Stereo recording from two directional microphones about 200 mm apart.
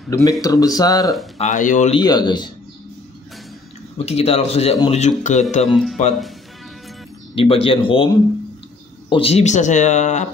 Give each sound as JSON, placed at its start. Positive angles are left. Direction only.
{"t": 0.1, "sound": "speech", "side_deg": 20}
{"t": 1.4, "sound": "speech", "side_deg": 40}
{"t": 2.0, "sound": "speech", "side_deg": 20}
{"t": 4.0, "sound": "speech", "side_deg": 30}
{"t": 5.7, "sound": "speech", "side_deg": 0}
{"t": 7.3, "sound": "speech", "side_deg": 25}
{"t": 9.1, "sound": "speech", "side_deg": 30}